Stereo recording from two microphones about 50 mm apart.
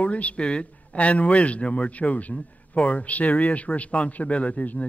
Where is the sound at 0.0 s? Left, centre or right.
Left.